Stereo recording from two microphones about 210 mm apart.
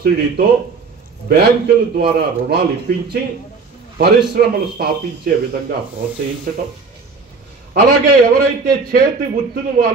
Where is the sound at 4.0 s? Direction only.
50° right (ahead or behind).